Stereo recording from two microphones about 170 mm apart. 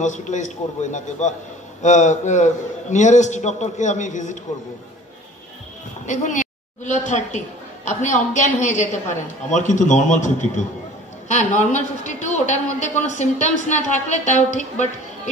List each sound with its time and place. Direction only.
0.0 s a woman's voice: 45° left (ahead or behind)
6.0 s a woman's voice: 45° left (ahead or behind)